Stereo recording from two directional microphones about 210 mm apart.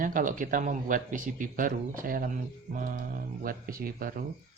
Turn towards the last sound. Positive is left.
turn(degrees=-45)  # may be behind; listen again after turning